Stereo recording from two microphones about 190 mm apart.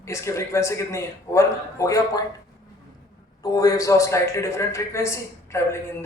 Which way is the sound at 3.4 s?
20° left (ahead or behind).